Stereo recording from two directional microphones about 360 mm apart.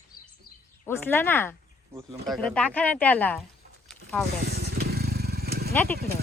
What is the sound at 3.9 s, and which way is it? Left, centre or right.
Zipper, centre.